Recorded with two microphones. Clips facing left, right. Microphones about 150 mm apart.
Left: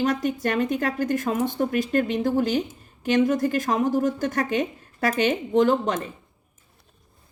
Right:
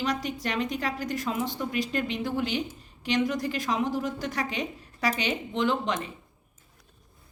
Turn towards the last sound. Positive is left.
turn(degrees=45)  # may be behind; listen again after turning